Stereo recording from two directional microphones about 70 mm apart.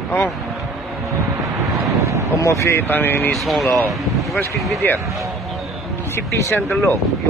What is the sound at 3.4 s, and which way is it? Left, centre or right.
Speech, centre.